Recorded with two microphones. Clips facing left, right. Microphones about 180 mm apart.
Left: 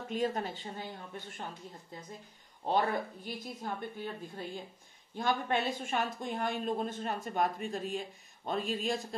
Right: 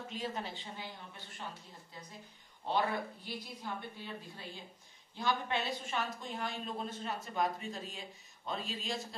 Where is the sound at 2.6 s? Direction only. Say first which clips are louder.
Left 3 dB; 45° left (ahead or behind).